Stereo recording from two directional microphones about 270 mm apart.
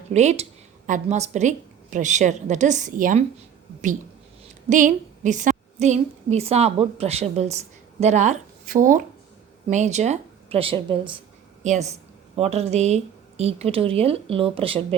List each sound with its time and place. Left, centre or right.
0.1 s a woman's voice: right
4.7 s a woman's voice: right